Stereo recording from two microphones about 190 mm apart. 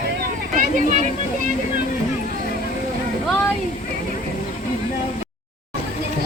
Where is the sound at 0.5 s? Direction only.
45° right (ahead or behind).